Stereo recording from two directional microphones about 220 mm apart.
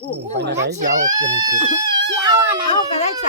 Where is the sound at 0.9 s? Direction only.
35° right (ahead or behind).